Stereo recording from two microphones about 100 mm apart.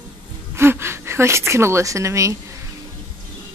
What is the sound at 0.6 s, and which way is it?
Speech, 25° right (ahead or behind).